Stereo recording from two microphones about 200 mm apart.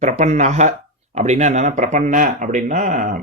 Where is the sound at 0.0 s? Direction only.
35° right (ahead or behind).